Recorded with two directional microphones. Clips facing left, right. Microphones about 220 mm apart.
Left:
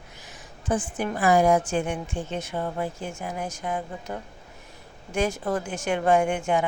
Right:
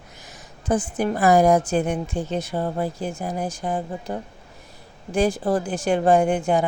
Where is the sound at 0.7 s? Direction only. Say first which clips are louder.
Right 4 dB; 40° right (ahead or behind).